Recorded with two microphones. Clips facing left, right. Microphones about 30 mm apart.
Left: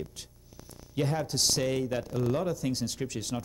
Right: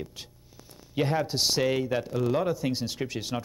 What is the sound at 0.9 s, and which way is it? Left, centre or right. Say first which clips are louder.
Speech: right 3 dB; right.